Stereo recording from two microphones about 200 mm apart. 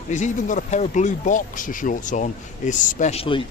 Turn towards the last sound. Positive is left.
turn(degrees=25)  # may be behind; listen again after turning